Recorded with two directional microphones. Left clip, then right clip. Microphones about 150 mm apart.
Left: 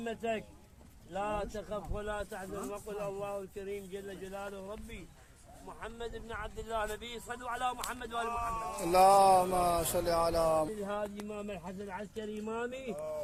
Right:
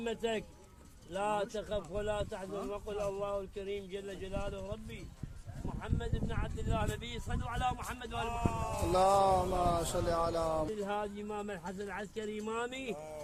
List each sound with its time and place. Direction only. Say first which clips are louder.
0.0 s speech: right 2 dB; 15° right (ahead or behind)
1.1 s speech: right 2 dB; 5° right (ahead or behind); by 4.4 s 10° left (ahead or behind)
5.8 s speech: even; 40° left (ahead or behind)
8.3 s speech: left 1 dB; centre (ahead or behind)
8.9 s speech: left 5 dB; 15° left (ahead or behind); by 11.6 s centre (ahead or behind)
11.9 s speech: even; 25° right (ahead or behind)